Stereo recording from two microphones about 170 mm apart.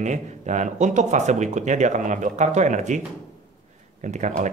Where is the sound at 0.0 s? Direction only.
45° right (ahead or behind).